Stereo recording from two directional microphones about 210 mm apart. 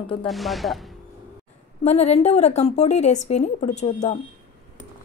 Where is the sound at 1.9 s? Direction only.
30° left (ahead or behind).